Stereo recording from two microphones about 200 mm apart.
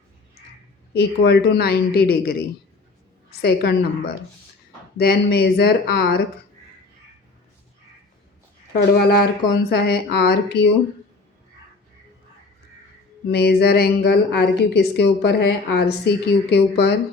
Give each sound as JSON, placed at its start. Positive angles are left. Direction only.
{"t": 0.9, "sound": "speech", "side_deg": 55}
{"t": 3.4, "sound": "speech", "side_deg": 50}
{"t": 9.0, "sound": "speech", "side_deg": 50}
{"t": 13.3, "sound": "a woman's voice", "side_deg": 55}